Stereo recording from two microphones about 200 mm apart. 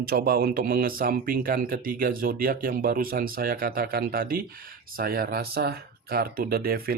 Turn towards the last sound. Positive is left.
turn(degrees=-50)  # may be behind; listen again after turning